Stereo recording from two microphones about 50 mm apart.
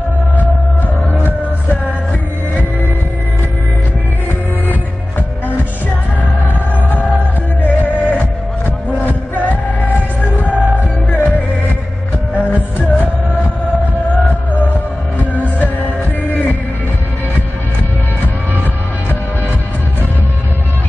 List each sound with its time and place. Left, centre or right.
1.1 s music: left
6.9 s music: left